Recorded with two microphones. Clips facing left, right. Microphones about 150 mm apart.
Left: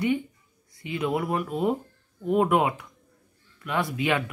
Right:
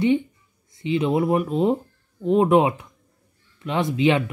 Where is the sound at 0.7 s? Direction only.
25° right (ahead or behind).